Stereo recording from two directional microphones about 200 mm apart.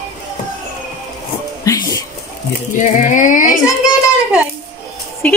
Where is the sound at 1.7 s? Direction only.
15° left (ahead or behind).